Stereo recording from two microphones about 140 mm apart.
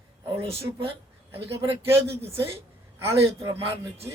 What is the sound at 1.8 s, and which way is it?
Speech, 20° right (ahead or behind).